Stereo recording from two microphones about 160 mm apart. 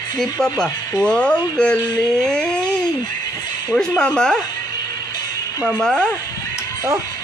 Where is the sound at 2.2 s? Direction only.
5° left (ahead or behind).